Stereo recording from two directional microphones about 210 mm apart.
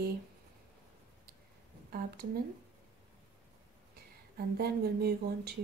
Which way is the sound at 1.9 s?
45° right (ahead or behind).